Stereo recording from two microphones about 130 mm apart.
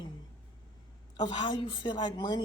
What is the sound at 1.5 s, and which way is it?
Speech, 35° left (ahead or behind).